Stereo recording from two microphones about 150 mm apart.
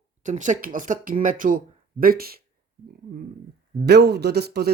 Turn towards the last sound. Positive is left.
turn(degrees=-90)